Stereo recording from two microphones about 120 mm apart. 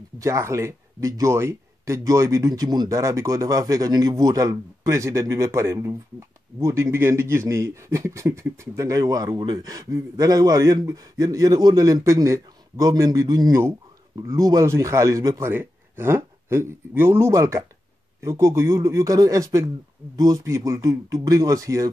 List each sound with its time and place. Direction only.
0.2 s speech: 25° right (ahead or behind)
13.5 s speech: 20° right (ahead or behind)